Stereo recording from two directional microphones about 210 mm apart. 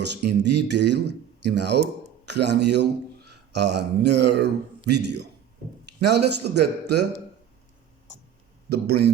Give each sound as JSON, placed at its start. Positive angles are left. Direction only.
{"t": 0.3, "sound": "speech", "side_deg": -55}
{"t": 8.7, "sound": "speech", "side_deg": -50}